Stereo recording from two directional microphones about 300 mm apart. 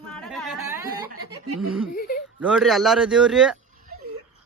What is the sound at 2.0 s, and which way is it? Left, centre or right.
Whimper, left.